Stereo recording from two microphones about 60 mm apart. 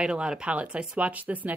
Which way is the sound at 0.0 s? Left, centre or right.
Centre.